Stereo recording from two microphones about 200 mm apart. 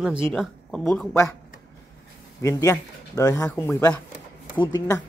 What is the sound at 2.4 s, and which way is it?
Speech, 15° left (ahead or behind).